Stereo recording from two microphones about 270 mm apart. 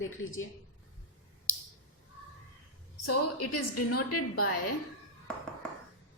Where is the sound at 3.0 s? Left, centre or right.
Left.